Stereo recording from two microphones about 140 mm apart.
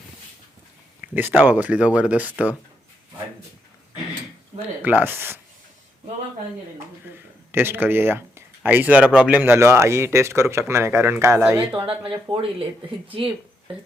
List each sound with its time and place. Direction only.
1.0 s speech: 15° right (ahead or behind)
4.8 s speech: 10° right (ahead or behind)
7.5 s speech: 15° right (ahead or behind)
12.1 s speech: 40° right (ahead or behind)